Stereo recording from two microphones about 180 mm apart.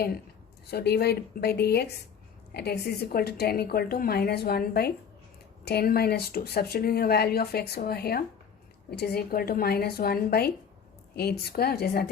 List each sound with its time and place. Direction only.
0.7 s a woman's voice: 60° left (ahead or behind)